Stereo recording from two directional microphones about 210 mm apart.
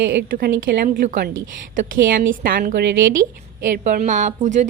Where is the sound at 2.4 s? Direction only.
45° right (ahead or behind).